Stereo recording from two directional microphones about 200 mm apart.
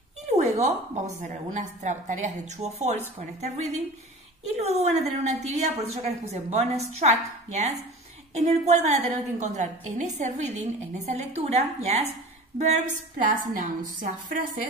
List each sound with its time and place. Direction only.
0.4 s a woman's voice: 35° right (ahead or behind)